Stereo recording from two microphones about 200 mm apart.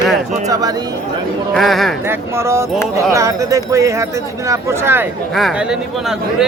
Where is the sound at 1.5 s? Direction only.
Centre (ahead or behind).